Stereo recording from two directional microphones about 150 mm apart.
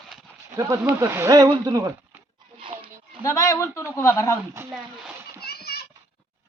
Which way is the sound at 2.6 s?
35° right (ahead or behind).